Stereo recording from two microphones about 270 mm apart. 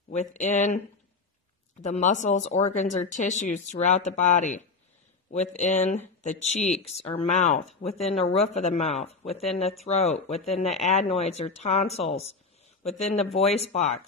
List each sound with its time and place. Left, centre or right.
0.1 s speech: left
1.8 s speech: left